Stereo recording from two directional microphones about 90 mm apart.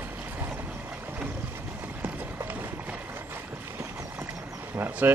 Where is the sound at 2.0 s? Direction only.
20° right (ahead or behind).